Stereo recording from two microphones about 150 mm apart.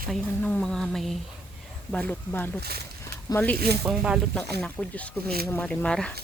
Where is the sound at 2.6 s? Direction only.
90° right.